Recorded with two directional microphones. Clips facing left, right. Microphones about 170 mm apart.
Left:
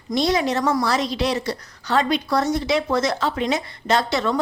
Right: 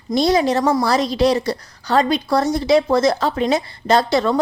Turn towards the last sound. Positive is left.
turn(degrees=-35)  # may be behind; listen again after turning